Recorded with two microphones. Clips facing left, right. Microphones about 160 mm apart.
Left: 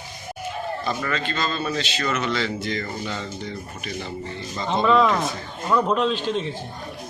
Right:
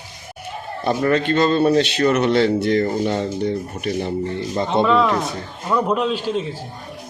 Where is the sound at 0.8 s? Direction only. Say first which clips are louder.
Right 12 dB; 55° right (ahead or behind).